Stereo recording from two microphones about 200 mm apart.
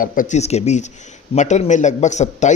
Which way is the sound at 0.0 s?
40° left (ahead or behind).